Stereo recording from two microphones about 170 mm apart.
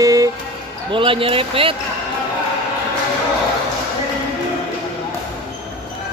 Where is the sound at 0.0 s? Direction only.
20° right (ahead or behind).